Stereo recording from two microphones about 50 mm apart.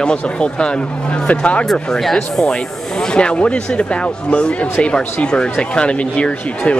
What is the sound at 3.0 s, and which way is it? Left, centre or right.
Speech, centre.